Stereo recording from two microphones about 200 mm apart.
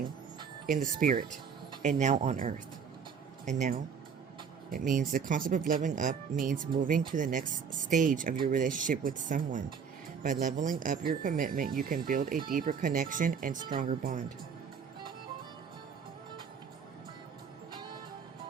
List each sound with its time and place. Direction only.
0.7 s speech: 45° right (ahead or behind)